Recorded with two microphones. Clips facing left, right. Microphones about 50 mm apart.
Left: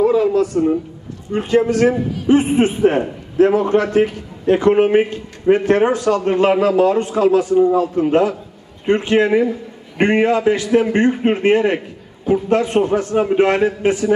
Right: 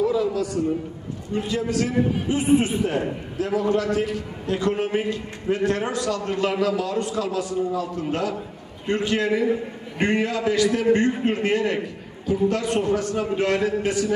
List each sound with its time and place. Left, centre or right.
0.0 s a man's voice: left